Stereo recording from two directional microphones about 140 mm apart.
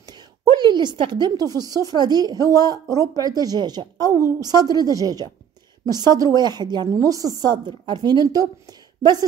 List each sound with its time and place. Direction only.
0.0 s a woman's voice: 30° right (ahead or behind)